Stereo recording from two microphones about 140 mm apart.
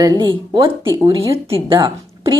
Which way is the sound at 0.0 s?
30° right (ahead or behind).